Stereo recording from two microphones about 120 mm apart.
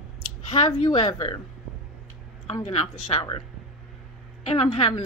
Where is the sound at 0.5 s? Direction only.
45° left (ahead or behind).